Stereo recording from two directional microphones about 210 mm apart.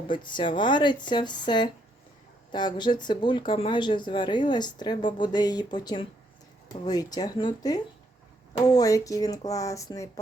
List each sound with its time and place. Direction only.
0.1 s speech: 20° left (ahead or behind)